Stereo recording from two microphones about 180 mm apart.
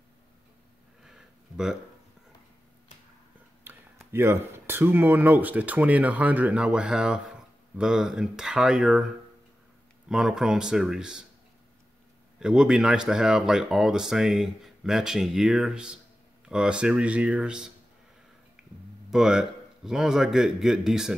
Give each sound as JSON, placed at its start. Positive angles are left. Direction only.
{"t": 1.0, "sound": "a sound", "side_deg": -5}
{"t": 3.6, "sound": "speech", "side_deg": -15}
{"t": 10.0, "sound": "speech", "side_deg": -5}
{"t": 12.4, "sound": "speech", "side_deg": -5}
{"t": 18.6, "sound": "a sound", "side_deg": -5}
{"t": 19.0, "sound": "speech", "side_deg": -5}